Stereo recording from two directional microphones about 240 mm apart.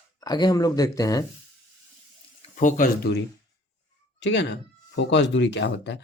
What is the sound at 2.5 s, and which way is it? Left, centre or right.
Speech, left.